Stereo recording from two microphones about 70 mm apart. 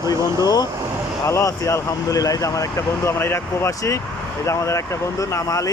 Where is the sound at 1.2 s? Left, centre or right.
Left.